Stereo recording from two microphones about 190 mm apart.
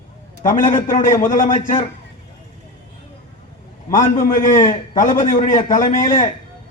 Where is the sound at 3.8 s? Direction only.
45° left (ahead or behind).